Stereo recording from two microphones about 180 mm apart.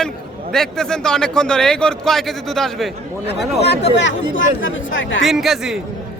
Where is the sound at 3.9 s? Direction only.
90° left.